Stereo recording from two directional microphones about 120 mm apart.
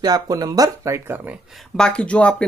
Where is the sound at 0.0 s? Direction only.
30° right (ahead or behind).